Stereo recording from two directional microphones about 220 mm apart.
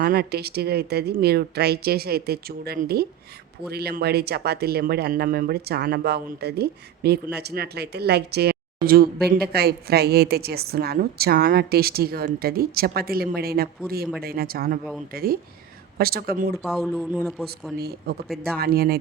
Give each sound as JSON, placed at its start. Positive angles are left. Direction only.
{"t": 0.0, "sound": "speech", "side_deg": -45}
{"t": 16.6, "sound": "speech", "side_deg": 0}
{"t": 17.7, "sound": "speech", "side_deg": -45}